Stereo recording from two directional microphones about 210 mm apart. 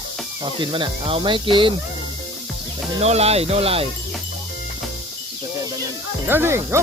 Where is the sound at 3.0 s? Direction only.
30° right (ahead or behind).